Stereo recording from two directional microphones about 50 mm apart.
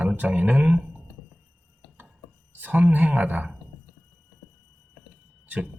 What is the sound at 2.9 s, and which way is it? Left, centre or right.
Speech, right.